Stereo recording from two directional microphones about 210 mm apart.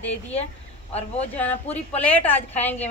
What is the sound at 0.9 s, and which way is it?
Speech, 30° left (ahead or behind).